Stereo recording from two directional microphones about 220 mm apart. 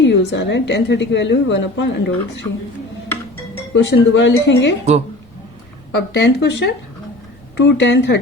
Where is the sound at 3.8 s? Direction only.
55° left (ahead or behind).